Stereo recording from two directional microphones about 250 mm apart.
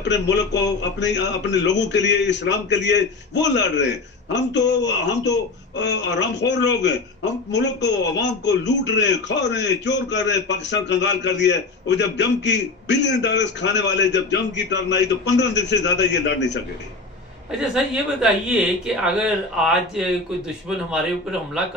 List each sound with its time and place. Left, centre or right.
0.3 s a man's voice: left
17.5 s speech: centre